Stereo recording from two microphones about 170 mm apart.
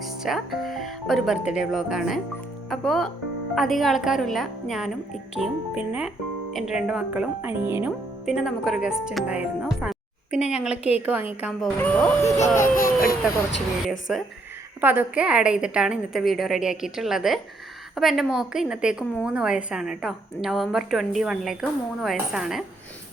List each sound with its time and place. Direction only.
0.2 s a woman's voice: centre (ahead or behind)
11.8 s speech: 10° left (ahead or behind)
12.5 s speech: 55° left (ahead or behind)
14.8 s speech: 10° right (ahead or behind)